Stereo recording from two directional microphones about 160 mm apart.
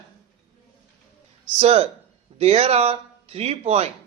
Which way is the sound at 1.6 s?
35° right (ahead or behind).